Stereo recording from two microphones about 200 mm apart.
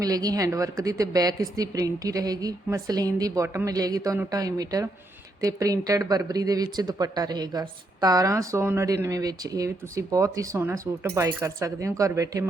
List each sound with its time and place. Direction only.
0.0 s speech: 20° right (ahead or behind)